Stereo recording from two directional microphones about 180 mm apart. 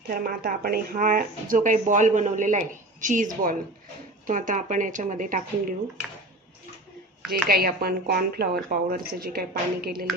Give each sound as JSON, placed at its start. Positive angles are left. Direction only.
{"t": 0.1, "sound": "speech", "side_deg": -55}
{"t": 4.3, "sound": "speech", "side_deg": -45}
{"t": 7.4, "sound": "a woman's voice", "side_deg": -55}